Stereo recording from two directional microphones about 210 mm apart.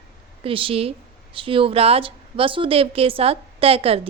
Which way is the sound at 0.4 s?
25° right (ahead or behind).